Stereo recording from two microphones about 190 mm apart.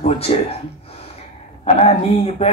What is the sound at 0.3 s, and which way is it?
Speech, 35° left (ahead or behind).